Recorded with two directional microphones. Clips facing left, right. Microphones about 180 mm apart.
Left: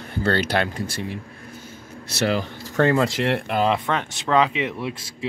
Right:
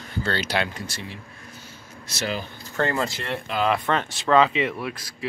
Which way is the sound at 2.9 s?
85° left.